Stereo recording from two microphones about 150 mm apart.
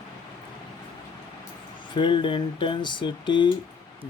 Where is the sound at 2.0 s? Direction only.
30° left (ahead or behind).